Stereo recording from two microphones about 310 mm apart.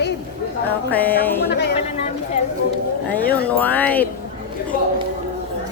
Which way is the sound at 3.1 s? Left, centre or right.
Centre.